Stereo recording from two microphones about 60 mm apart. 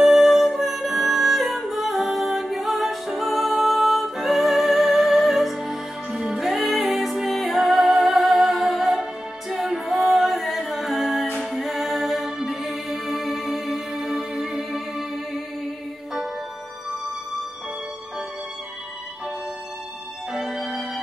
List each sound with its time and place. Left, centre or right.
0.0 s music: centre
20.3 s music: centre